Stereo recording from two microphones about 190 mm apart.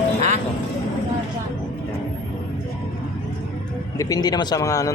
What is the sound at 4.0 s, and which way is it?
Speech, 20° left (ahead or behind).